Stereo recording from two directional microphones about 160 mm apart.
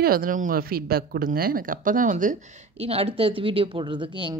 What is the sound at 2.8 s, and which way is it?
Speech, 40° right (ahead or behind).